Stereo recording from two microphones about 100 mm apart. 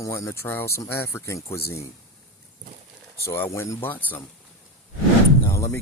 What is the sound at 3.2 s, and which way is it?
Speech, 25° left (ahead or behind).